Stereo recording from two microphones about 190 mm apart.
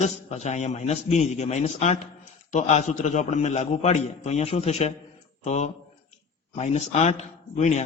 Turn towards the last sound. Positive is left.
turn(degrees=40)  # may be behind; listen again after turning